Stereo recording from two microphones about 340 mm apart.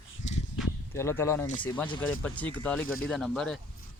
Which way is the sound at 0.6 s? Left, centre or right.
Centre.